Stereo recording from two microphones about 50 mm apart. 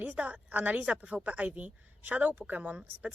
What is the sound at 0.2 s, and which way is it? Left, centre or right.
Speech, right.